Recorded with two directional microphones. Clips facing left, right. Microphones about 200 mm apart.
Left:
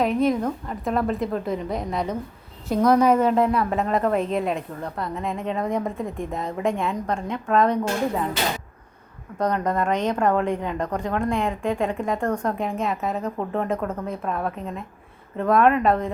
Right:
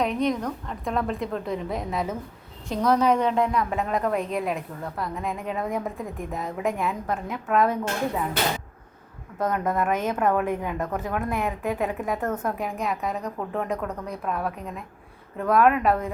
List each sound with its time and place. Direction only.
0.0 s a woman's voice: 5° left (ahead or behind)
2.6 s a woman's voice: 10° left (ahead or behind); by 7.8 s 5° right (ahead or behind)
9.4 s a woman's voice: 5° right (ahead or behind)